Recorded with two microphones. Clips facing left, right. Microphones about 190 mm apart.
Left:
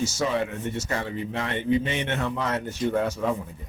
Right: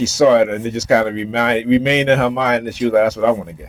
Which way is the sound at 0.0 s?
75° right (ahead or behind).